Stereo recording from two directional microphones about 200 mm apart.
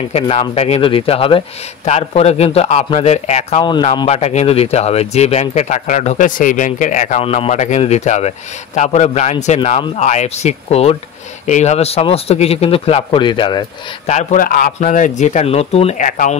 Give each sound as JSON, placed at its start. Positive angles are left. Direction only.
{"t": 0.1, "sound": "speech", "side_deg": 30}
{"t": 14.0, "sound": "speech", "side_deg": 40}